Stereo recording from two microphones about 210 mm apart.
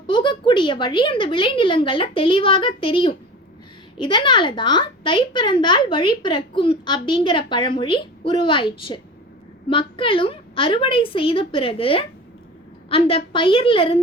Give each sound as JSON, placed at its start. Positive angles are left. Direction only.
{"t": 0.1, "sound": "a woman's voice", "side_deg": 20}